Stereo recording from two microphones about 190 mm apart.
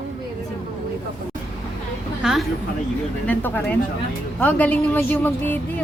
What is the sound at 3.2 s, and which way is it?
A woman's voice, 10° left (ahead or behind).